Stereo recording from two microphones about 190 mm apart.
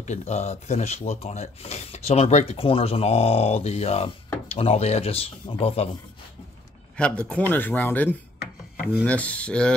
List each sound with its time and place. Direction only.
0.0 s speech: 35° left (ahead or behind)
7.0 s speech: 5° left (ahead or behind)
7.5 s a sound: 10° left (ahead or behind)